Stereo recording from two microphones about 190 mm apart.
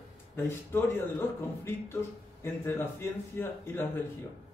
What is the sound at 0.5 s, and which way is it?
Speech, 10° left (ahead or behind).